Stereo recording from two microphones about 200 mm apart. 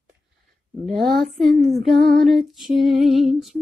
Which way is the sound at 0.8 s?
Centre (ahead or behind).